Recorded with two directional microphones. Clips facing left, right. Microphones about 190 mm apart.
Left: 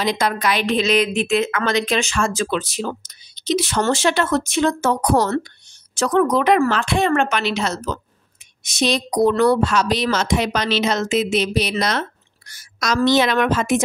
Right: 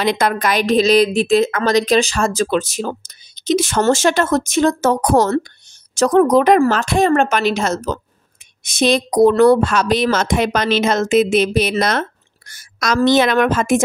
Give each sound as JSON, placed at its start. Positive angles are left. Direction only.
{"t": 0.0, "sound": "a woman's voice", "side_deg": -60}